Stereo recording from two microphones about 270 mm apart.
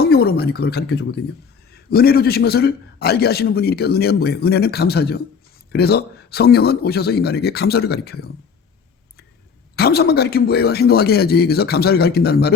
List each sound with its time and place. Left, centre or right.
0.1 s a man's voice: left
9.7 s a man's voice: left